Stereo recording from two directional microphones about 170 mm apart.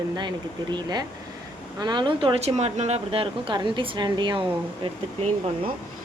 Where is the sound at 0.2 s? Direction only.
25° right (ahead or behind).